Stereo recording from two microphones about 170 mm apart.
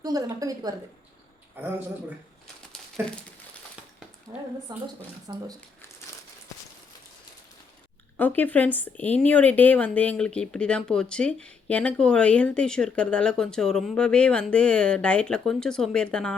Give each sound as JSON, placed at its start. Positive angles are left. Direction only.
{"t": 0.0, "sound": "a woman's voice", "side_deg": -20}
{"t": 1.5, "sound": "speech", "side_deg": -10}
{"t": 4.3, "sound": "a woman's voice", "side_deg": -20}
{"t": 8.1, "sound": "speech", "side_deg": 10}